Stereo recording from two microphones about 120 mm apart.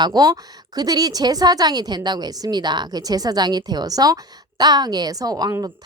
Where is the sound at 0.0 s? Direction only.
35° right (ahead or behind).